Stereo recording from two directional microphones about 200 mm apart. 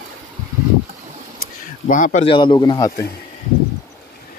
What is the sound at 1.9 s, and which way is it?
Speech, 40° left (ahead or behind).